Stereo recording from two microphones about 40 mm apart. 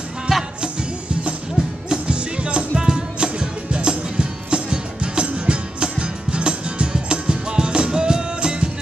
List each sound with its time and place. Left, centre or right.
0.3 s music: centre
1.9 s music: right